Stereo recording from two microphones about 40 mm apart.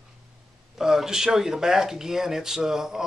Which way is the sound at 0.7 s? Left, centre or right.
Centre.